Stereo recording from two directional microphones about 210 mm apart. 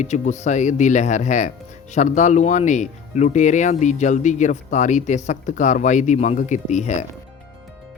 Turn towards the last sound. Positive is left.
turn(degrees=35)  # may be behind; listen again after turning